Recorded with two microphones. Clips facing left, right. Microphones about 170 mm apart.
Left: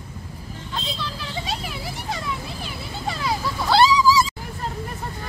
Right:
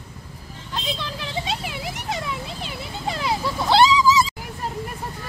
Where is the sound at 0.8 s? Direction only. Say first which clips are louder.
Right 1 dB; 20° right (ahead or behind).